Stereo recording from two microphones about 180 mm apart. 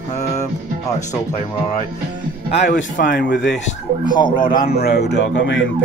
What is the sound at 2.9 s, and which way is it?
Speech, 50° left (ahead or behind).